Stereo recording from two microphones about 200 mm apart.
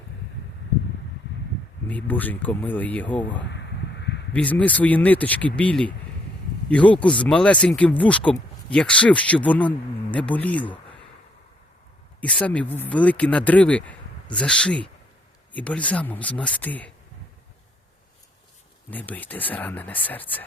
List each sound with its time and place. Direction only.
1.9 s speech: 10° left (ahead or behind)
3.4 s a sound: 60° left (ahead or behind)
4.3 s speech: 10° left (ahead or behind)
12.2 s speech: 5° left (ahead or behind)
18.9 s speech: 10° left (ahead or behind)